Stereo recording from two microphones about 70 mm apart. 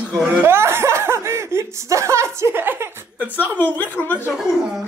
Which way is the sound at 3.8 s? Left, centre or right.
Left.